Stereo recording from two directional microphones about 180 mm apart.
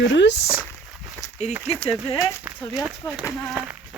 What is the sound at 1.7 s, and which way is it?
Speech, centre (ahead or behind).